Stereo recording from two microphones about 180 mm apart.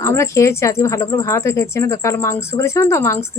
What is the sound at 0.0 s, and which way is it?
Speech, 15° left (ahead or behind).